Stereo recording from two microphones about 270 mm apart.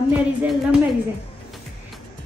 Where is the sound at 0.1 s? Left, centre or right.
Centre.